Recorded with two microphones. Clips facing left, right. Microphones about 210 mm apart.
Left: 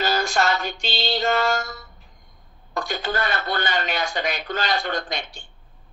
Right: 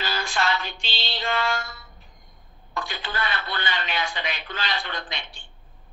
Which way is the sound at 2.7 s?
45° left (ahead or behind).